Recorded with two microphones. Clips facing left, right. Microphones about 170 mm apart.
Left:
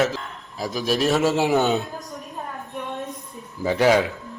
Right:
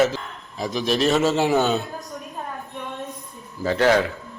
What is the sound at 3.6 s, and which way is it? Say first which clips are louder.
Speech: even; 15° left (ahead or behind).